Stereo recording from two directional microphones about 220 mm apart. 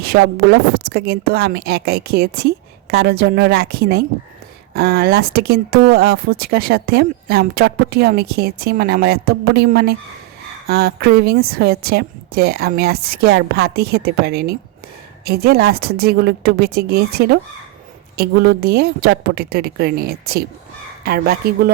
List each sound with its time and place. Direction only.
0.0 s speech: 45° right (ahead or behind)